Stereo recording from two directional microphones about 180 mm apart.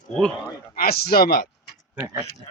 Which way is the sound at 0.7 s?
55° left (ahead or behind).